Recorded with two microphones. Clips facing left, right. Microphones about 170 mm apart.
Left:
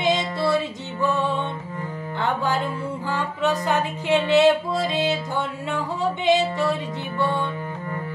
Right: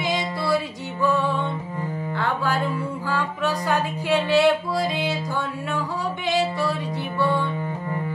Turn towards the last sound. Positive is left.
turn(degrees=20)  # may be behind; listen again after turning